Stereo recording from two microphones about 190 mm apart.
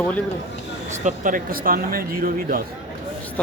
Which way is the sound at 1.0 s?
45° right (ahead or behind).